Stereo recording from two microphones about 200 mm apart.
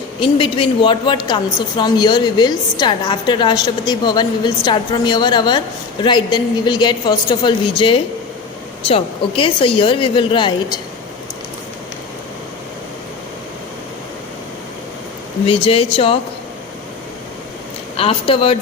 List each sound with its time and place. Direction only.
0.2 s a woman's voice: 25° left (ahead or behind)
15.4 s a woman's voice: 30° left (ahead or behind)
17.9 s a woman's voice: 30° left (ahead or behind)